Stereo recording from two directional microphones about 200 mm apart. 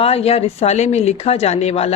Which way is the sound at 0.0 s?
30° left (ahead or behind).